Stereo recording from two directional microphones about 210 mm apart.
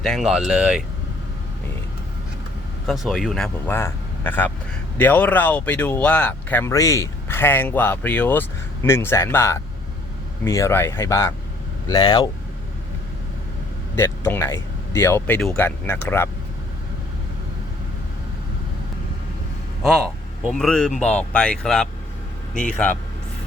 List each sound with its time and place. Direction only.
0.0 s speech: centre (ahead or behind)
2.8 s speech: centre (ahead or behind); by 12.3 s 20° left (ahead or behind)
13.9 s speech: 10° left (ahead or behind)
20.4 s speech: centre (ahead or behind)